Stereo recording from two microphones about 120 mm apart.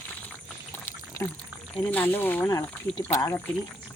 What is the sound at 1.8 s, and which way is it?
Speech, 15° left (ahead or behind).